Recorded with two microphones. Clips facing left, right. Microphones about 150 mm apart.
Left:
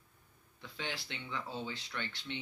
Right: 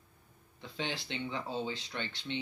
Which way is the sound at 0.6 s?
25° right (ahead or behind).